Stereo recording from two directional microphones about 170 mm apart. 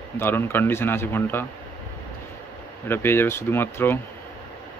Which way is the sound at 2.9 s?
15° left (ahead or behind).